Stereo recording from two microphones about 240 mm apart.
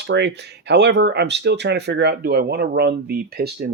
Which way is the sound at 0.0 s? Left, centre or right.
Right.